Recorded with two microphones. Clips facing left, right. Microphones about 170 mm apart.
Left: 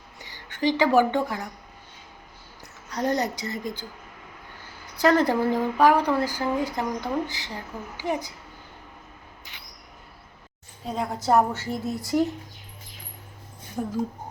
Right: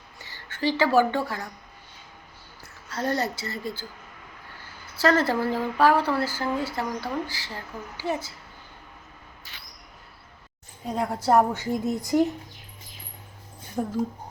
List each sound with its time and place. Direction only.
0.2 s speech: 15° left (ahead or behind)
2.9 s a woman's voice: 15° left (ahead or behind)
4.9 s a woman's voice: 15° left (ahead or behind)
9.4 s a sound: 20° left (ahead or behind)
10.8 s a woman's voice: 10° right (ahead or behind)
13.8 s speech: 5° right (ahead or behind)